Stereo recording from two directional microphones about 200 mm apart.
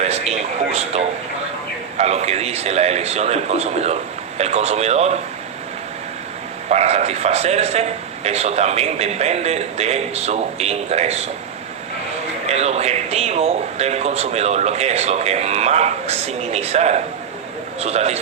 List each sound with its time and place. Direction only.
0.0 s a man's voice: 30° right (ahead or behind)
6.7 s a man's voice: 35° right (ahead or behind)
12.5 s a man's voice: 30° right (ahead or behind)